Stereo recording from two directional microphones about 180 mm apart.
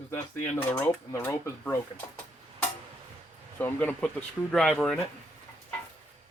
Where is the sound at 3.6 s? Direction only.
10° left (ahead or behind).